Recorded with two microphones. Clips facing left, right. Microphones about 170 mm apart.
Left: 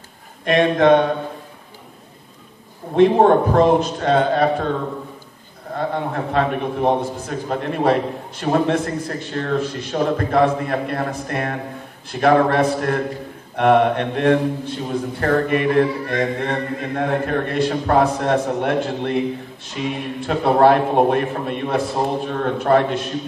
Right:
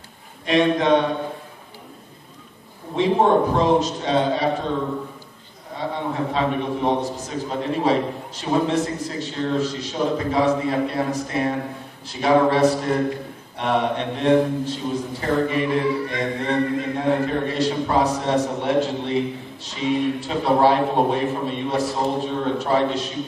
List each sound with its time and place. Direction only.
0.5 s a man's voice: 55° left (ahead or behind)
3.0 s a man's voice: 55° left (ahead or behind)
6.3 s a man's voice: 55° left (ahead or behind)